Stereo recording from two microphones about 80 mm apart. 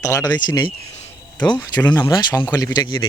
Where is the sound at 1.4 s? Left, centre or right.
Centre.